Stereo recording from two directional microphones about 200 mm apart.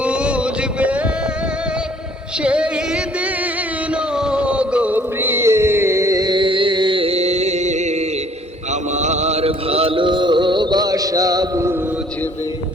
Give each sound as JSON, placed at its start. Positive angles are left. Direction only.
{"t": 0.0, "sound": "a sound", "side_deg": -5}
{"t": 2.4, "sound": "music", "side_deg": -5}
{"t": 4.1, "sound": "music", "side_deg": -5}
{"t": 9.0, "sound": "music", "side_deg": -35}